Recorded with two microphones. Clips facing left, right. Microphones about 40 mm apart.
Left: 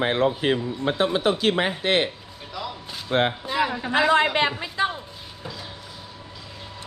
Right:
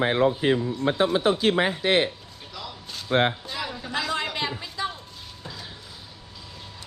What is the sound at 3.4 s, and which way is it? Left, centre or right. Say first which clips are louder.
A woman's voice: left 8 dB; left.